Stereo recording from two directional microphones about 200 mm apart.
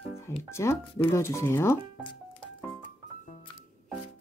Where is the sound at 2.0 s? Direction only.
25° left (ahead or behind).